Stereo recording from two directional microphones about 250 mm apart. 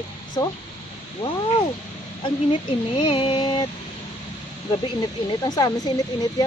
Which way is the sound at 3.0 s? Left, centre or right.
Left.